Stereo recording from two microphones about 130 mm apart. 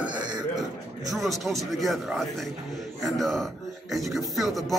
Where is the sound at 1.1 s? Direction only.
Centre (ahead or behind).